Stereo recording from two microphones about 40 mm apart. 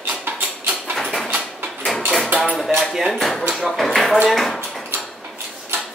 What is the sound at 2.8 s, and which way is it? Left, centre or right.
Speech, centre.